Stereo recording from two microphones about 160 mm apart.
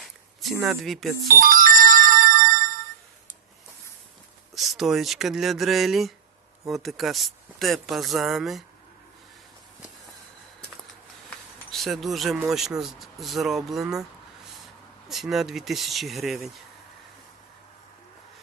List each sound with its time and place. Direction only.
0.6 s speech: centre (ahead or behind)
1.4 s music: 60° right (ahead or behind)
4.5 s speech: centre (ahead or behind)
11.3 s a sound: centre (ahead or behind)
12.5 s speech: centre (ahead or behind)
15.1 s speech: centre (ahead or behind)